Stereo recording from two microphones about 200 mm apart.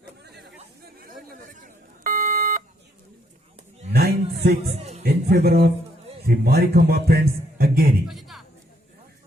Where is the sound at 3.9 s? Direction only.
50° right (ahead or behind).